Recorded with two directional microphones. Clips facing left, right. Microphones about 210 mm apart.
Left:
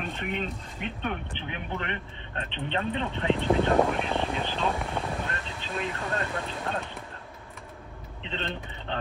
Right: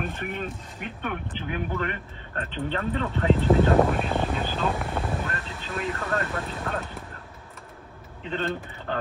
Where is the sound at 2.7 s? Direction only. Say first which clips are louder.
Right 1 dB; 25° left (ahead or behind).